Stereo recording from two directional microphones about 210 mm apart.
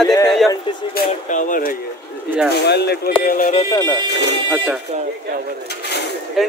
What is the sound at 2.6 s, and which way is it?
Speech, 50° left (ahead or behind).